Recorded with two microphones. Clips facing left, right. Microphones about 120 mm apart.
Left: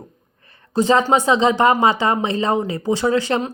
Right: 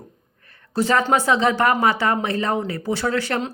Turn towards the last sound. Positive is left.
turn(degrees=15)  # may be behind; listen again after turning